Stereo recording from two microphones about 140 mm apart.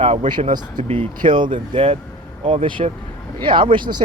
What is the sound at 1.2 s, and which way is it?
Speech, 35° right (ahead or behind).